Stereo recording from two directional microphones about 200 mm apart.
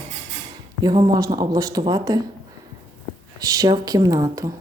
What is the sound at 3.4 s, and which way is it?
Speech, 20° right (ahead or behind).